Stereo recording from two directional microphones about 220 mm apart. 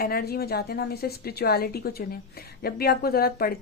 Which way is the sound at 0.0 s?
45° left (ahead or behind).